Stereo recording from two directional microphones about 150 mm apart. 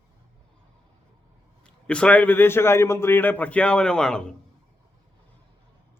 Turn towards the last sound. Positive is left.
turn(degrees=5)  # may be behind; listen again after turning